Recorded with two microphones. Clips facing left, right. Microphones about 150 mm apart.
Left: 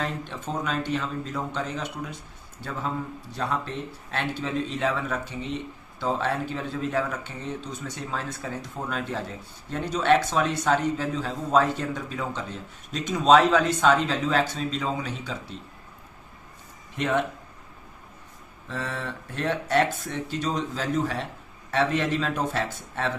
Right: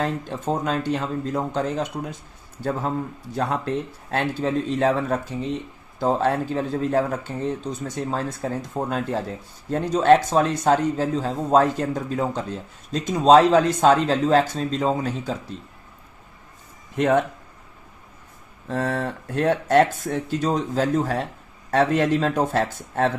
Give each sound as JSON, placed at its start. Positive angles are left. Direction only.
{"t": 0.0, "sound": "a man's voice", "side_deg": -45}
{"t": 4.1, "sound": "a man's voice", "side_deg": -45}
{"t": 17.0, "sound": "a man's voice", "side_deg": -50}
{"t": 18.7, "sound": "a man's voice", "side_deg": -45}